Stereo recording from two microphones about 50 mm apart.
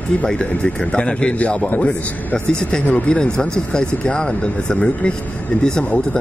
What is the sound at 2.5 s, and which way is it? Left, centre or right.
Speech, centre.